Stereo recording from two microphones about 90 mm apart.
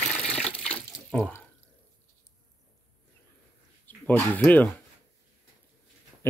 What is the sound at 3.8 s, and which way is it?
Speech, 20° left (ahead or behind).